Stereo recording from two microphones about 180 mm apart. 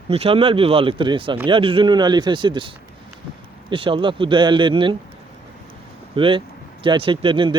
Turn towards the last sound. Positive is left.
turn(degrees=-30)  # may be behind; listen again after turning